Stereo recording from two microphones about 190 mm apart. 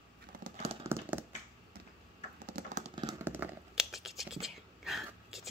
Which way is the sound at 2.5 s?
50° right (ahead or behind).